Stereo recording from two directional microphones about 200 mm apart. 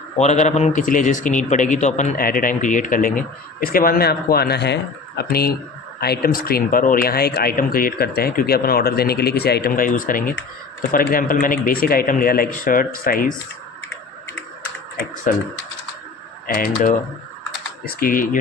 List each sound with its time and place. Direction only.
0.2 s a man's voice: 35° left (ahead or behind)
14.9 s a man's voice: 40° left (ahead or behind)
16.5 s speech: 45° left (ahead or behind)